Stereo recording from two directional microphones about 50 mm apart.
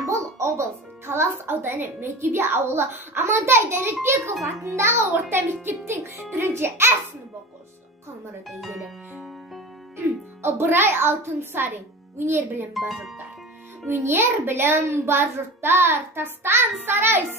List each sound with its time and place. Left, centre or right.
0.0 s music: right
1.5 s a child's voice: right
4.2 s speech: centre
4.5 s a child's voice: right
4.8 s a child's voice: right
8.5 s speech: centre
10.4 s a child's voice: right
12.7 s speech: centre
13.8 s a child's voice: right